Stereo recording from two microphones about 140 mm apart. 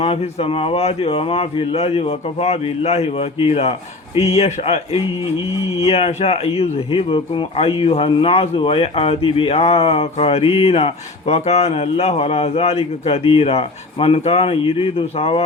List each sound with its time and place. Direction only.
0.0 s speech: 45° left (ahead or behind)